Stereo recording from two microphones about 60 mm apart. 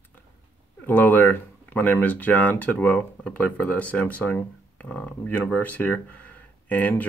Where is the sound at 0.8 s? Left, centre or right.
Left.